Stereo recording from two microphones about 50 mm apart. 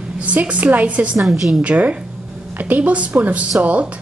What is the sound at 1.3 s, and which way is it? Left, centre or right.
Speech, centre.